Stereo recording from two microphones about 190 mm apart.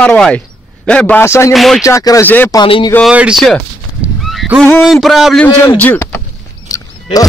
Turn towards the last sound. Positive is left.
turn(degrees=20)  # may be behind; listen again after turning